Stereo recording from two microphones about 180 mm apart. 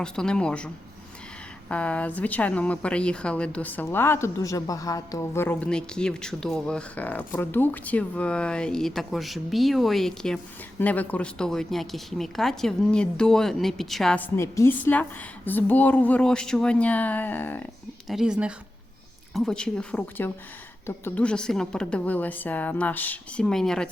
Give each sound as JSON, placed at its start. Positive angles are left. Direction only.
{"t": 0.0, "sound": "speech", "side_deg": 5}
{"t": 1.7, "sound": "speech", "side_deg": 5}
{"t": 14.3, "sound": "a woman's voice", "side_deg": 15}
{"t": 18.1, "sound": "a woman's voice", "side_deg": -5}